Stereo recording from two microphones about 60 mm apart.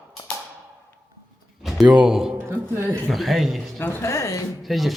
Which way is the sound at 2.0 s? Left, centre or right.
Centre.